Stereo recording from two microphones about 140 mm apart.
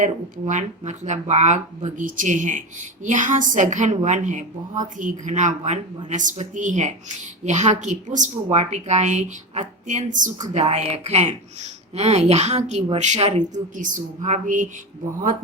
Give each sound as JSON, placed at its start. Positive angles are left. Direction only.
{"t": 0.0, "sound": "speech", "side_deg": -65}
{"t": 10.4, "sound": "speech", "side_deg": -55}